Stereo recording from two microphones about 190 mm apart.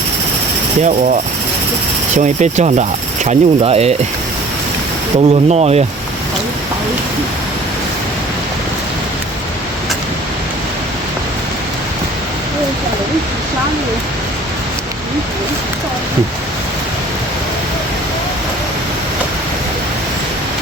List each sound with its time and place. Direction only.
2.1 s speech: 40° right (ahead or behind)
5.3 s speech: 35° right (ahead or behind)